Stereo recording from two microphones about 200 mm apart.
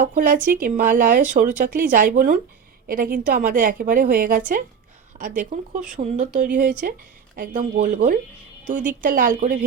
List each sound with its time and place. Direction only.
0.0 s a woman's voice: 40° right (ahead or behind)